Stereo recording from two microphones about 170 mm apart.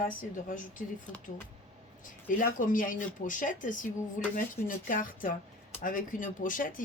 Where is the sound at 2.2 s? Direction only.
50° left (ahead or behind).